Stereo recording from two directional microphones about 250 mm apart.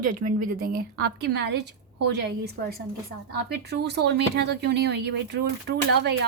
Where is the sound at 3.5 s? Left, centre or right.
Right.